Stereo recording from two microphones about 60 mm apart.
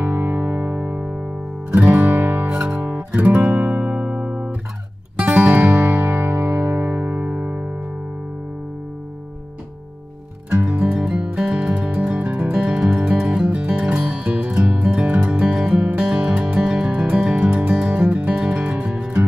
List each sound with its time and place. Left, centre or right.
0.0 s music: right
4.0 s music: centre; by 6.3 s right
6.3 s music: right
10.6 s music: right